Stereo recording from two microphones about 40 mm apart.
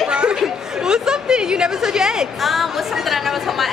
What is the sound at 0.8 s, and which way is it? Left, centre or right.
Speech, centre.